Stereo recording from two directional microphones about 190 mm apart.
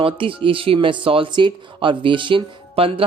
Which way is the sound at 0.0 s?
30° right (ahead or behind).